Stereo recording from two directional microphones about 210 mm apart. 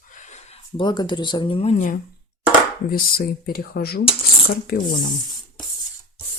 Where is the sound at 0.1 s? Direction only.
35° left (ahead or behind).